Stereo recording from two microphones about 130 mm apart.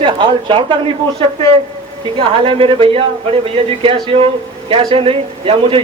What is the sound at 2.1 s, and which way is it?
Speech, 45° right (ahead or behind).